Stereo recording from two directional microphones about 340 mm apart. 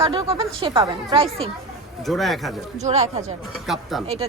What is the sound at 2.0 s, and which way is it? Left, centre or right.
Speech, centre.